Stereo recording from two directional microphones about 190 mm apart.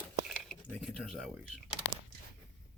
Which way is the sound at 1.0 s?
5° right (ahead or behind).